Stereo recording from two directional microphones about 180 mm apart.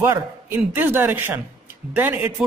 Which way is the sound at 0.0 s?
15° right (ahead or behind).